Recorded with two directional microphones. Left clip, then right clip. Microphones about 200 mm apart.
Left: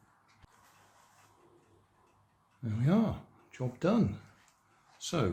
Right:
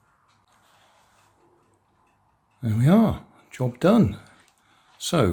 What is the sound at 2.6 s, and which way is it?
Speech, 45° right (ahead or behind).